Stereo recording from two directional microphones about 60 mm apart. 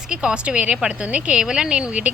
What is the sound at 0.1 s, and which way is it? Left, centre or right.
A woman's voice, centre.